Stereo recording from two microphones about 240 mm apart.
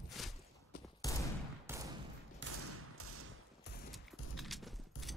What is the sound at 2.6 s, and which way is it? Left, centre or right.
Thump, right.